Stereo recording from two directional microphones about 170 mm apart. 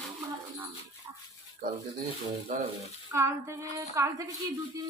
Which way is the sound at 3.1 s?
15° right (ahead or behind).